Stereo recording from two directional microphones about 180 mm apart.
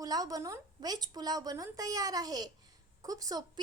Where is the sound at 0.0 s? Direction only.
20° right (ahead or behind).